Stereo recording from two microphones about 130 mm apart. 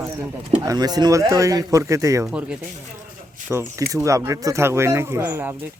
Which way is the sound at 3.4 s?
20° right (ahead or behind).